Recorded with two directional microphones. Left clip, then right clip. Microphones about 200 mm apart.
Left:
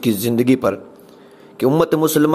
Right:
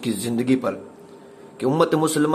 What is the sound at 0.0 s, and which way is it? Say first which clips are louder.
A man's voice: left 7 dB; 35° left (ahead or behind).